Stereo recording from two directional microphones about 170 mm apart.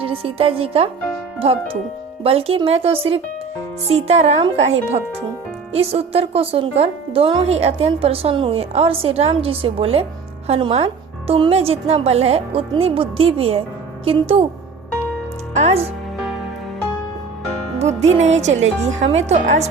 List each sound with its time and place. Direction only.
0.0 s speech: 35° right (ahead or behind)
5.7 s speech: 35° right (ahead or behind)
15.5 s speech: 40° right (ahead or behind)
17.7 s speech: 40° right (ahead or behind)